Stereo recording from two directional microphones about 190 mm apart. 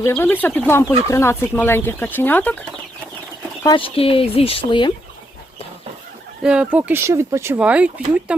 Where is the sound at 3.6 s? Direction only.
25° left (ahead or behind).